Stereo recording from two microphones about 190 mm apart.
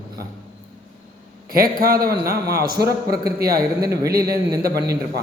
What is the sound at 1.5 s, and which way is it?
Speech, 50° right (ahead or behind).